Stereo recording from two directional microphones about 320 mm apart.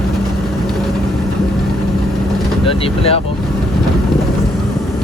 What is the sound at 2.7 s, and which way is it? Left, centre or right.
Speech, centre.